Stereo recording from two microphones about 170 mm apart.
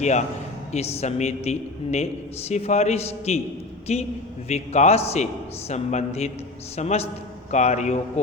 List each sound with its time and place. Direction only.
0.0 s a man's voice: 45° left (ahead or behind)